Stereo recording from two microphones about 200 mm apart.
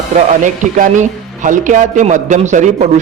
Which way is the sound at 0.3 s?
40° right (ahead or behind).